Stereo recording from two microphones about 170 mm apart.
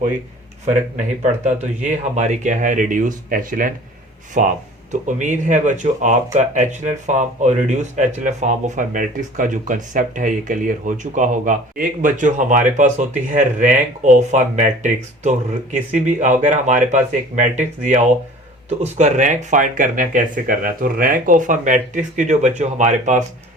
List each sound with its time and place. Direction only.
1.2 s speech: 45° right (ahead or behind)